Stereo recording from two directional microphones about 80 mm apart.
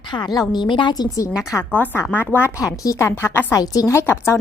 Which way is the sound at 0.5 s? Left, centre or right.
Left.